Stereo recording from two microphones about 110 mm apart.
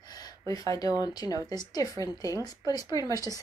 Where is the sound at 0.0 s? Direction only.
35° left (ahead or behind).